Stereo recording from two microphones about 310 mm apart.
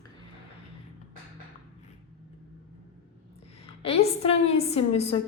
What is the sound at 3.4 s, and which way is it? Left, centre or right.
A woman's voice, centre.